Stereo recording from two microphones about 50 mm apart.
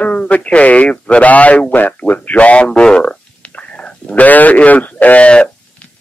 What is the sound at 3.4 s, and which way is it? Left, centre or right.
Whispering, left.